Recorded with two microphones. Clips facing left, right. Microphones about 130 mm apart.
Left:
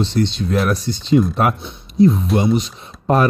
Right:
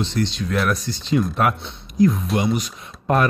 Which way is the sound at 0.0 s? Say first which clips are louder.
Left 4 dB; 35° left (ahead or behind).